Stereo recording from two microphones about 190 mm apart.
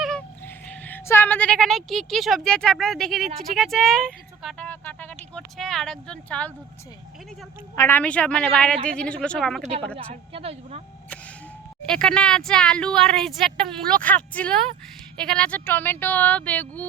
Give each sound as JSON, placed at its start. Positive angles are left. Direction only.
{"t": 0.0, "sound": "a sound", "side_deg": 5}
{"t": 0.7, "sound": "speech", "side_deg": 10}
{"t": 7.8, "sound": "speech", "side_deg": 10}
{"t": 10.3, "sound": "speech", "side_deg": -30}
{"t": 11.9, "sound": "speech", "side_deg": 5}